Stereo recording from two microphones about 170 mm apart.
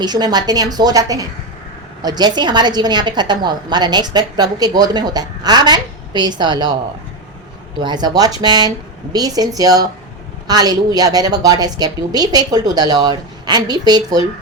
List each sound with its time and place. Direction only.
0.0 s a woman's voice: 25° right (ahead or behind)
7.8 s a woman's voice: 25° right (ahead or behind)